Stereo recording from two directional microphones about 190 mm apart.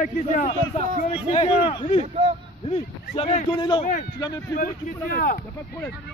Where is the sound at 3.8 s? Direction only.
40° left (ahead or behind).